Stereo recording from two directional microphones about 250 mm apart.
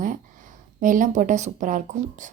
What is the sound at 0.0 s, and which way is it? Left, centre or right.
Speech, right.